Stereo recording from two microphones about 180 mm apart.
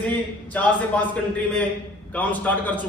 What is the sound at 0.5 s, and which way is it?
Speech, 10° left (ahead or behind).